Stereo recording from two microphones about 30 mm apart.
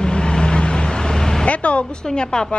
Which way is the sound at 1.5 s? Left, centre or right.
Left.